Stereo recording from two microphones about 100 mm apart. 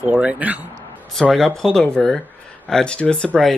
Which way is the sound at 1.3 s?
Centre (ahead or behind).